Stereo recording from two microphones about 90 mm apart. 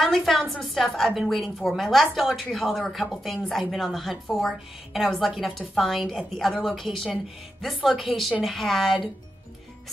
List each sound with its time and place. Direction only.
0.0 s a woman's voice: centre (ahead or behind)